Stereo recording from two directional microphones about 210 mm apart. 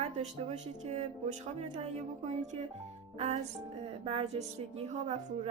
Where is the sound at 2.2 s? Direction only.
35° right (ahead or behind).